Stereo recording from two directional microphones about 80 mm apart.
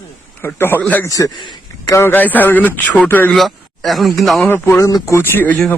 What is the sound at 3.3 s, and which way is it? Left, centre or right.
Speech, centre.